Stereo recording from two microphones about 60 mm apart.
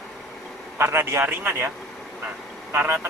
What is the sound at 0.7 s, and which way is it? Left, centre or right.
Speech, right.